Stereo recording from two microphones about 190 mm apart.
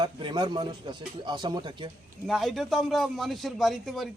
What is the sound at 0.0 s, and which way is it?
Speech, 25° right (ahead or behind).